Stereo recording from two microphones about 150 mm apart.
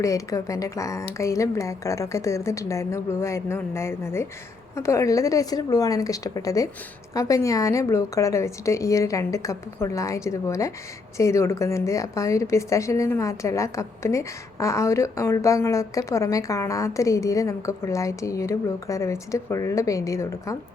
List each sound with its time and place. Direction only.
0.0 s a woman's voice: 20° left (ahead or behind)